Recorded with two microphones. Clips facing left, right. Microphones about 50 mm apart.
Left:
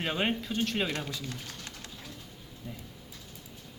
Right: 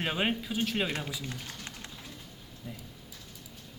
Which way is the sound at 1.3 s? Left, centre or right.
Right.